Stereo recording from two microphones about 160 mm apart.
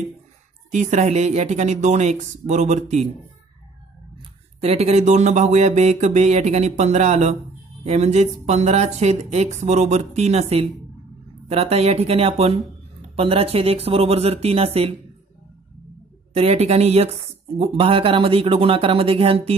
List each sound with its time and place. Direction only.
0.7 s speech: 50° right (ahead or behind)
4.2 s speech: 40° right (ahead or behind)
16.3 s speech: 40° right (ahead or behind)